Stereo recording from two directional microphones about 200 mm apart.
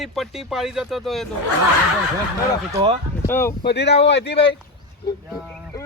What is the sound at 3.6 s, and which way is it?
Speech, 55° left (ahead or behind).